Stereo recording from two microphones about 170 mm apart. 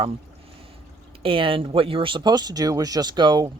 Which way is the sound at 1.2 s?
30° right (ahead or behind).